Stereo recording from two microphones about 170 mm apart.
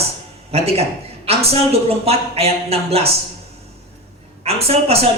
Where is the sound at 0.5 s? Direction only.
35° right (ahead or behind).